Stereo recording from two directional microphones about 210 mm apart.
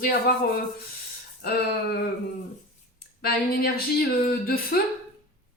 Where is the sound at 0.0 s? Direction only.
45° left (ahead or behind).